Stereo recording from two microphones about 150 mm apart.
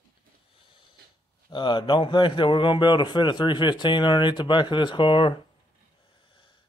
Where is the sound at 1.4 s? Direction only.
30° left (ahead or behind).